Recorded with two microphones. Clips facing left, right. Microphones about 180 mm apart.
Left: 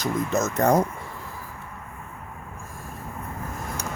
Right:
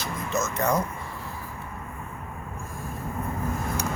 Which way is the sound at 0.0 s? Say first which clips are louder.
Left 5 dB; 45° left (ahead or behind).